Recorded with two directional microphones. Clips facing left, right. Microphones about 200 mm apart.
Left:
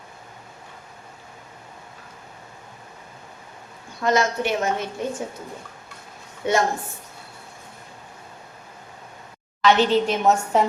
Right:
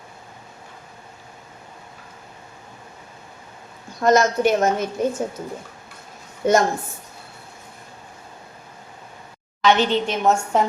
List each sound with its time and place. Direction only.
4.0 s a woman's voice: 45° right (ahead or behind)
6.4 s a woman's voice: 45° right (ahead or behind)
9.6 s a woman's voice: centre (ahead or behind)